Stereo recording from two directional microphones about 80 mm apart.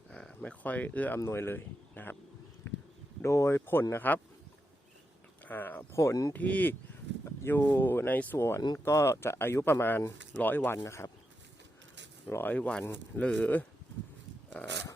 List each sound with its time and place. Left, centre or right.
0.1 s speech: centre; by 2.1 s left
2.6 s a sound: left
3.2 s speech: left
5.5 s speech: left
5.9 s speech: left
6.3 s speech: centre
8.4 s speech: left
10.3 s speech: left
10.8 s speech: left
12.3 s speech: left